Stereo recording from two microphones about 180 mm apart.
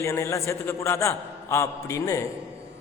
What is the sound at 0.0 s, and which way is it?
A man's voice, 15° left (ahead or behind).